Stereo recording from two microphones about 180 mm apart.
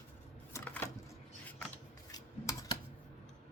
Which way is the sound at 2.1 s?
20° left (ahead or behind).